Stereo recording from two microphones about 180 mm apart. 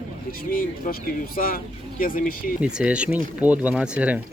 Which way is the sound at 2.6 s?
5° right (ahead or behind).